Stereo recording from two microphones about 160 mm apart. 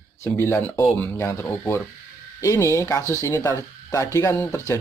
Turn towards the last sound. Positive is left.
turn(degrees=20)  # may be behind; listen again after turning